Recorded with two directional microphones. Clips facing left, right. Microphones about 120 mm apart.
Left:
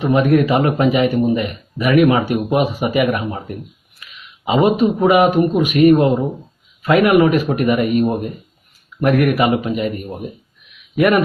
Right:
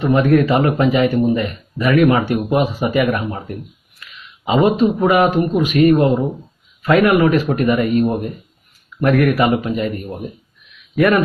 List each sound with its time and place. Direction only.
0.0 s a man's voice: 15° left (ahead or behind)
4.0 s a sound: 20° left (ahead or behind)
4.4 s a man's voice: 20° left (ahead or behind)